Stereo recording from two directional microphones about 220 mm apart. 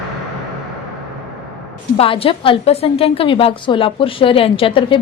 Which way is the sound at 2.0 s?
25° left (ahead or behind).